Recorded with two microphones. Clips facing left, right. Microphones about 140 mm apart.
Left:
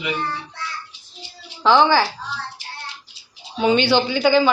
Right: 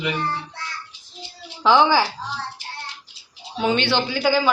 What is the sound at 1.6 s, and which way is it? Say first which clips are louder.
Speech: left 1 dB; 10° right (ahead or behind).